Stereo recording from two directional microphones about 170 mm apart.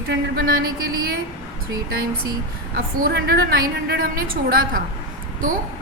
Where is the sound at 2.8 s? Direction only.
65° right (ahead or behind).